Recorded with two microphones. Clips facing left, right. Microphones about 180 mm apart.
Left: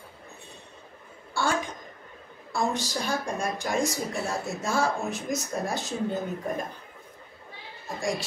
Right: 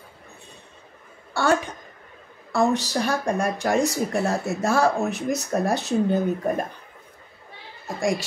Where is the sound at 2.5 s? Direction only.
65° right (ahead or behind).